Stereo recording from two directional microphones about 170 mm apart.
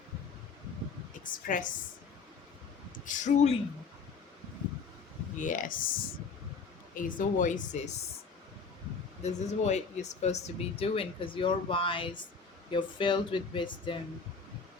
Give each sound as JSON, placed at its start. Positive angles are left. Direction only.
{"t": 1.5, "sound": "speech", "side_deg": 50}
{"t": 3.1, "sound": "speech", "side_deg": 45}
{"t": 5.4, "sound": "speech", "side_deg": 50}
{"t": 9.2, "sound": "speech", "side_deg": 40}